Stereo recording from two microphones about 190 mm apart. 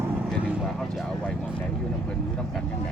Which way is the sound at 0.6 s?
Centre (ahead or behind).